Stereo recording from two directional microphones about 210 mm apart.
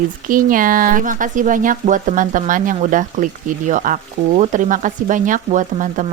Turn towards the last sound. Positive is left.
turn(degrees=-35)  # may be behind; listen again after turning